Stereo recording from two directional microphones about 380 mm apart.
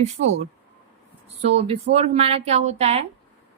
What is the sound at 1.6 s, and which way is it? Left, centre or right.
A woman's voice, centre.